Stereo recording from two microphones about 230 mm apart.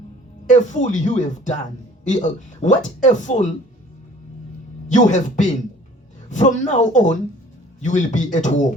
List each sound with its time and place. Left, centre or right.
0.4 s speech: left
4.9 s speech: left